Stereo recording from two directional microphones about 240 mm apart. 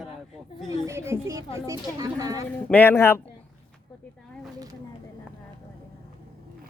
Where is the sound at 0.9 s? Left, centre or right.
Centre.